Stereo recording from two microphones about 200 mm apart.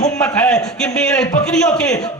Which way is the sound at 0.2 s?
10° left (ahead or behind).